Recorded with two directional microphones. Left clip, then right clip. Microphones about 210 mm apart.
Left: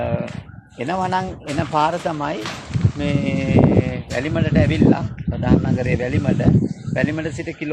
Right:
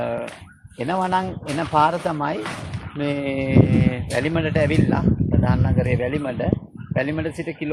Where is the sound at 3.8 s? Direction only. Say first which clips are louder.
Right 1 dB; 30° right (ahead or behind).